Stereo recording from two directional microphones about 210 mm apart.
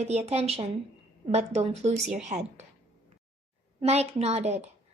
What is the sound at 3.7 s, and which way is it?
Speech, 30° right (ahead or behind).